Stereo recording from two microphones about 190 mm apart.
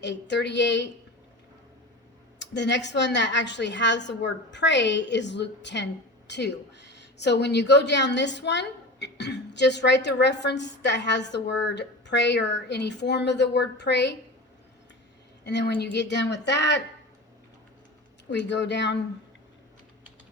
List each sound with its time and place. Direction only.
0.0 s a woman's voice: 65° left (ahead or behind)
2.4 s a woman's voice: 65° left (ahead or behind)
15.4 s a woman's voice: 65° left (ahead or behind)
18.3 s a woman's voice: 65° left (ahead or behind)